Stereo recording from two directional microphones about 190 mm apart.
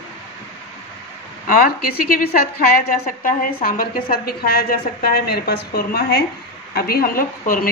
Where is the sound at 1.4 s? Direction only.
45° left (ahead or behind).